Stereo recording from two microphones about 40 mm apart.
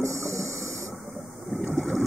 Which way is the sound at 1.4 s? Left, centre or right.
Centre.